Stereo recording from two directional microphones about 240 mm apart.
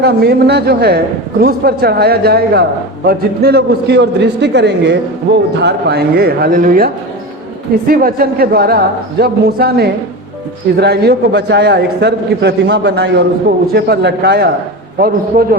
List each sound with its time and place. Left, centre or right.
0.0 s a man's voice: right